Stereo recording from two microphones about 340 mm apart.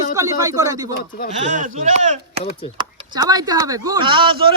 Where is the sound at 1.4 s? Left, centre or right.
Right.